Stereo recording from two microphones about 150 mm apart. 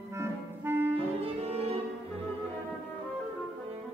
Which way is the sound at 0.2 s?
15° right (ahead or behind).